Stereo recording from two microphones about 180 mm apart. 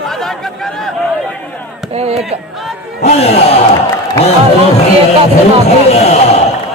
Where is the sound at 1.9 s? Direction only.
35° right (ahead or behind).